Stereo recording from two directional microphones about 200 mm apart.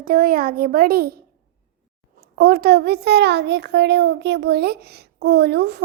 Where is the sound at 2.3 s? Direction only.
50° right (ahead or behind).